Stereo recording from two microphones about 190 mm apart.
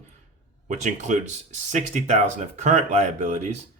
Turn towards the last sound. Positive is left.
turn(degrees=-35)  # may be behind; listen again after turning